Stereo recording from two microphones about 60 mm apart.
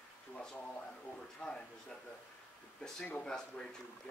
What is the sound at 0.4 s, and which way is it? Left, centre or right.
Speech, centre.